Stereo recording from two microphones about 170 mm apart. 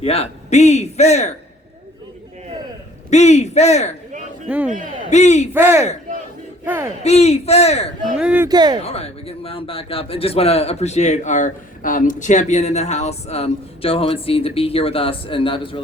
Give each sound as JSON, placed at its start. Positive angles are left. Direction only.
{"t": 0.0, "sound": "a man's voice", "side_deg": 35}
{"t": 3.1, "sound": "a man's voice", "side_deg": 40}
{"t": 4.4, "sound": "a man's voice", "side_deg": -5}
{"t": 5.1, "sound": "speech", "side_deg": 40}
{"t": 5.5, "sound": "a man's voice", "side_deg": -10}
{"t": 7.0, "sound": "a man's voice", "side_deg": 40}
{"t": 8.2, "sound": "a man's voice", "side_deg": -5}
{"t": 8.4, "sound": "speech", "side_deg": -25}
{"t": 8.8, "sound": "a man's voice", "side_deg": 35}